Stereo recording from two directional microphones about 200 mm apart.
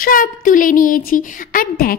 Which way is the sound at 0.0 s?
45° left (ahead or behind).